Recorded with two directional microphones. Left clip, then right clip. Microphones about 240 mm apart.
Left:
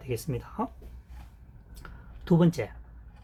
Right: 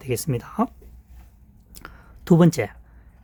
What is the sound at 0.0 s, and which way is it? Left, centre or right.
Speech, right.